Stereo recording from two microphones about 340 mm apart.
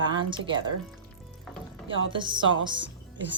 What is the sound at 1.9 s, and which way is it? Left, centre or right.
A woman's voice, centre.